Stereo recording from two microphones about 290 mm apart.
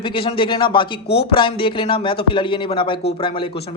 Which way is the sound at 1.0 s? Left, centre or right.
Left.